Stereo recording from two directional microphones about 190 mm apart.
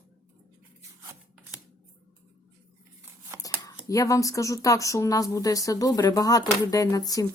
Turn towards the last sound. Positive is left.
turn(degrees=20)  # may be behind; listen again after turning